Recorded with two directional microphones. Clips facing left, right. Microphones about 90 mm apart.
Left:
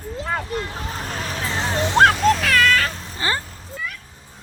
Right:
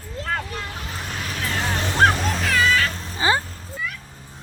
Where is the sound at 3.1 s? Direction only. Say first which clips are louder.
Right 5 dB; 15° right (ahead or behind).